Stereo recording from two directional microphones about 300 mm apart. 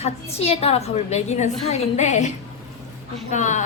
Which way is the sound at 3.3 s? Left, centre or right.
Left.